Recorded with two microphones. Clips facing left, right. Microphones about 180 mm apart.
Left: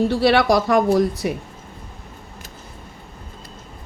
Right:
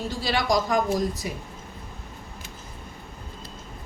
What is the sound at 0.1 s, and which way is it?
Speech, 65° left (ahead or behind).